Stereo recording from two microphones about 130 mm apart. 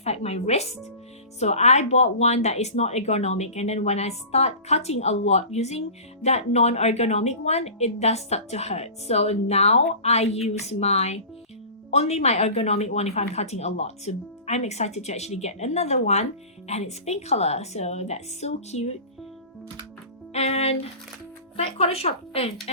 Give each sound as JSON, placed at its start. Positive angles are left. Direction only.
{"t": 0.0, "sound": "a woman's voice", "side_deg": 55}
{"t": 20.3, "sound": "speech", "side_deg": 55}